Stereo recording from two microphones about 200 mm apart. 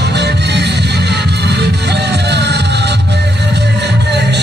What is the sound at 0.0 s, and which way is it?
Music, 55° right (ahead or behind).